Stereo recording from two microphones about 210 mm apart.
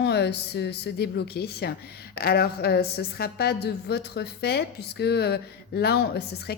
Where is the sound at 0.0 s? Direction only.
55° left (ahead or behind).